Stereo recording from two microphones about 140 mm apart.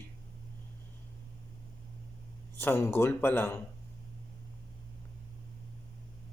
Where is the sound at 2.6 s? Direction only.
15° left (ahead or behind).